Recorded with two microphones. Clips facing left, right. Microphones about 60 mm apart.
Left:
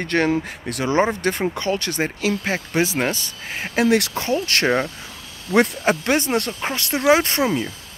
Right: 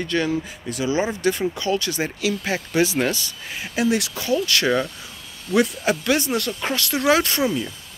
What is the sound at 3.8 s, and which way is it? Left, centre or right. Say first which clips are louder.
Speech: left 4 dB; left.